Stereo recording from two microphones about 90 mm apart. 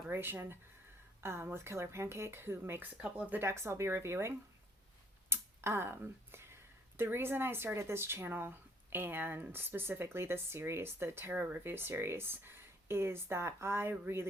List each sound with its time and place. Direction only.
0.1 s speech: 25° right (ahead or behind)
3.4 s speech: 30° right (ahead or behind)
5.3 s a sound: 25° right (ahead or behind)
6.9 s speech: 25° right (ahead or behind)